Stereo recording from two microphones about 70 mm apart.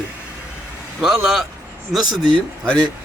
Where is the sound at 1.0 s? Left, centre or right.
Centre.